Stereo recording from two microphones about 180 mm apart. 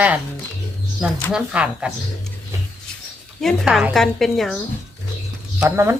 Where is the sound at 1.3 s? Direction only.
5° right (ahead or behind).